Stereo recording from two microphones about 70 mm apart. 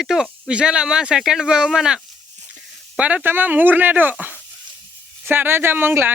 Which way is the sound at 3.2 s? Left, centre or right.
Right.